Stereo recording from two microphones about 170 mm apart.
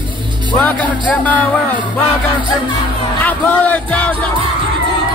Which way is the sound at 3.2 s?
10° left (ahead or behind).